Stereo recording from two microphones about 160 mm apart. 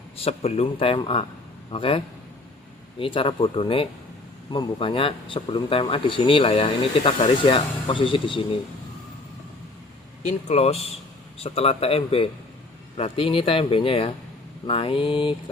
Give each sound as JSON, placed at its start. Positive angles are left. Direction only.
{"t": 0.2, "sound": "speech", "side_deg": 40}
{"t": 3.0, "sound": "speech", "side_deg": 35}
{"t": 10.2, "sound": "speech", "side_deg": 40}